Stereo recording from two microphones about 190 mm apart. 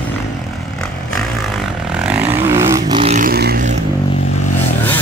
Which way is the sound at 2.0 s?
10° right (ahead or behind).